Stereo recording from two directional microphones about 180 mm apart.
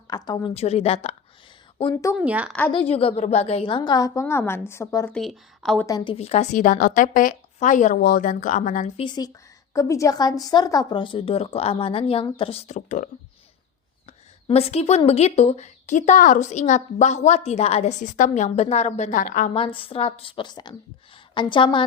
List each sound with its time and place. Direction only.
0.1 s speech: 20° left (ahead or behind)
0.5 s a woman's voice: 35° left (ahead or behind)
1.8 s speech: 20° left (ahead or behind)
2.1 s a woman's voice: 5° right (ahead or behind)
2.5 s a woman's voice: 5° left (ahead or behind)
2.7 s speech: 30° left (ahead or behind); by 5.1 s 15° left (ahead or behind)
5.1 s speech: centre (ahead or behind)
5.8 s speech: 20° left (ahead or behind)
6.1 s a woman's voice: 35° left (ahead or behind)
9.0 s speech: 25° left (ahead or behind); by 13.1 s 40° left (ahead or behind)
14.4 s a woman's voice: 35° left (ahead or behind)
19.5 s speech: 30° left (ahead or behind)